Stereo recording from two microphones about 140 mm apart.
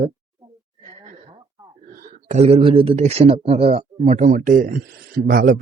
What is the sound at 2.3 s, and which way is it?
A man's voice, 50° right (ahead or behind).